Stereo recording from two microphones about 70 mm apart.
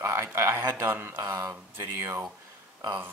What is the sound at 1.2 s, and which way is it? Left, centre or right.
A man's voice, right.